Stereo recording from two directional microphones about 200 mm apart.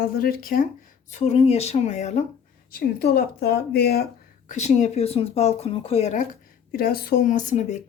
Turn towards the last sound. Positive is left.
turn(degrees=35)  # may be behind; listen again after turning